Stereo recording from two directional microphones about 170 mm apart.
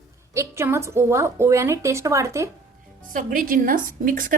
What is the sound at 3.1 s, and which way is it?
A woman's voice, 50° right (ahead or behind).